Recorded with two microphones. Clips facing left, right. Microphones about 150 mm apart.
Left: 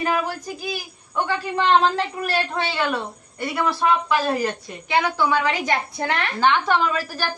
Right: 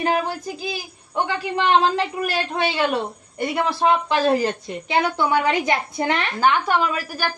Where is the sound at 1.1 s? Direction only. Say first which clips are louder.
Even; 15° right (ahead or behind).